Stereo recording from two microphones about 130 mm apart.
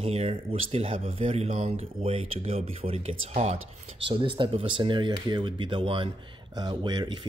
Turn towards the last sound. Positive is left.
turn(degrees=-35)  # may be behind; listen again after turning